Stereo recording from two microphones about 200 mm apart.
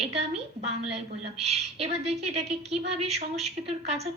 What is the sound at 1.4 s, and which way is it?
A woman's voice, 30° right (ahead or behind).